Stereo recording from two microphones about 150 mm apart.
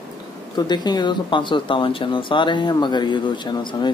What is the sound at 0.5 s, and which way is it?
Speech, 30° left (ahead or behind).